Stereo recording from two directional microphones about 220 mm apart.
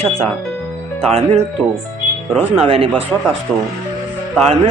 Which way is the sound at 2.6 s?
25° right (ahead or behind).